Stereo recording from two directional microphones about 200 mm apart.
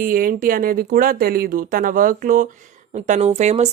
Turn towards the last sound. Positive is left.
turn(degrees=-35)  # may be behind; listen again after turning